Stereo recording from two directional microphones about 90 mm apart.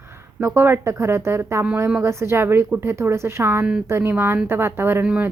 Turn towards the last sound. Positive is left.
turn(degrees=-10)  # may be behind; listen again after turning